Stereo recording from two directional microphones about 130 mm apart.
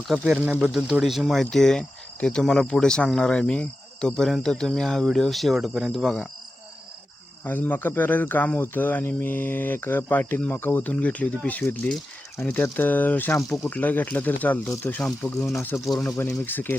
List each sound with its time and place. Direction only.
0.1 s speech: 5° right (ahead or behind)
7.4 s speech: 15° left (ahead or behind)